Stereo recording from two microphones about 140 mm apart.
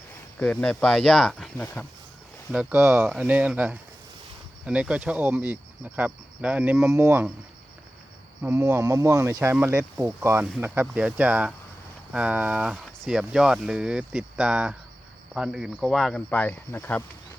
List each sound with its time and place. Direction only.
0.3 s speech: 10° left (ahead or behind)
2.5 s speech: 5° right (ahead or behind)
8.4 s speech: 15° right (ahead or behind); by 16.2 s centre (ahead or behind)
16.3 s speech: 10° left (ahead or behind)